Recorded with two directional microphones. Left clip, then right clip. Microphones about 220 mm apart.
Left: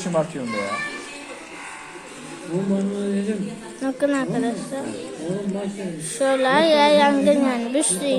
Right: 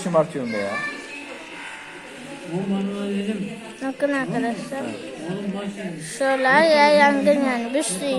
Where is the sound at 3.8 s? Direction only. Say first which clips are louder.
Left 1 dB; 5° left (ahead or behind).